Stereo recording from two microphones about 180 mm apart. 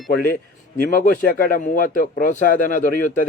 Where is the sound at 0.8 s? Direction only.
50° left (ahead or behind).